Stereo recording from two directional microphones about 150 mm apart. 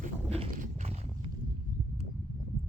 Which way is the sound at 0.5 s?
60° right (ahead or behind).